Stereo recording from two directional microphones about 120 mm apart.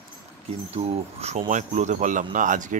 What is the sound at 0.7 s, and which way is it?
Speech, 65° right (ahead or behind).